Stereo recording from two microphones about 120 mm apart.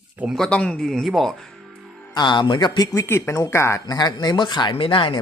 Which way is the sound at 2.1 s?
40° left (ahead or behind).